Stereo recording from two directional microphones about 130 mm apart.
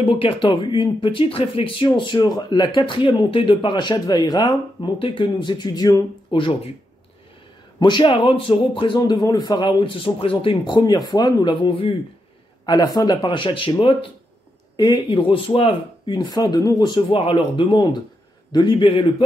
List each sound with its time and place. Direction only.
0.0 s speech: 45° left (ahead or behind)
7.8 s speech: 35° left (ahead or behind)